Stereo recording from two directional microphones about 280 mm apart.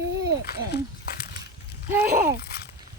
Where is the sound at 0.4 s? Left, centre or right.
Left.